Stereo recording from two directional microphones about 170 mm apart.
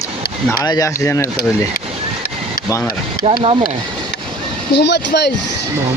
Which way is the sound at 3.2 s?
35° right (ahead or behind).